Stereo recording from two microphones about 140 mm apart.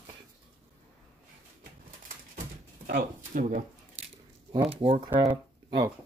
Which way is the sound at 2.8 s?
80° right.